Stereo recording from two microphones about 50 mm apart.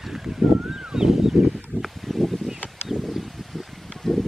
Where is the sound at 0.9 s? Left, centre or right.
Centre.